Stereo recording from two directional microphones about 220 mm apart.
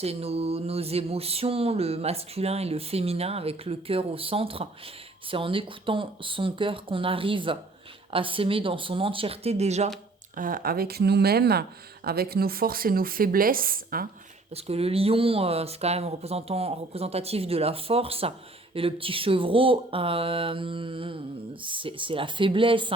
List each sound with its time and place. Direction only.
0.0 s speech: 25° right (ahead or behind)
14.5 s speech: 25° right (ahead or behind)